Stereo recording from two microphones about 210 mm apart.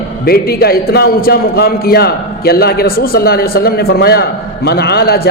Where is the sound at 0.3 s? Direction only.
45° left (ahead or behind).